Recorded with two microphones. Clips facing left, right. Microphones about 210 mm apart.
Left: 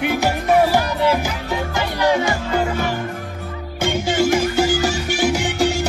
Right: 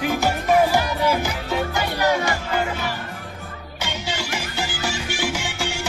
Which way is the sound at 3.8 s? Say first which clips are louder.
Left 11 dB; 50° left (ahead or behind).